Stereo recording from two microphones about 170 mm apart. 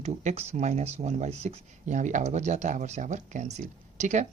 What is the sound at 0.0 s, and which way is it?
Speech, 40° right (ahead or behind).